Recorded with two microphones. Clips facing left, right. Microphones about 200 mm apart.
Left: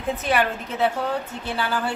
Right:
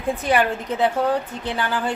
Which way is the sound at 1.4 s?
15° right (ahead or behind).